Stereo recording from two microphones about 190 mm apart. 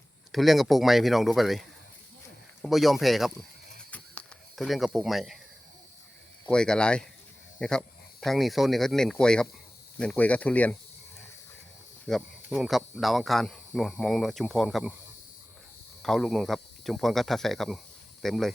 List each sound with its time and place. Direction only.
0.3 s speech: centre (ahead or behind)
3.9 s a sound: 5° left (ahead or behind)
6.5 s speech: 5° left (ahead or behind)
12.0 s speech: centre (ahead or behind)
16.0 s speech: centre (ahead or behind)